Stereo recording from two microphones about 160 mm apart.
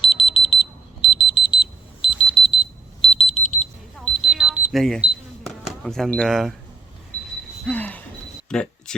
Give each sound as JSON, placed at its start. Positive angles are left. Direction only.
{"t": 0.0, "sound": "alarm", "side_deg": 35}
{"t": 3.9, "sound": "alarm clock", "side_deg": 0}
{"t": 4.8, "sound": "camera", "side_deg": 0}
{"t": 7.6, "sound": "a sound", "side_deg": 10}